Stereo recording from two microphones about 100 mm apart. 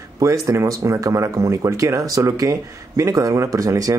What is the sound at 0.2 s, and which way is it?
Speech, 30° right (ahead or behind).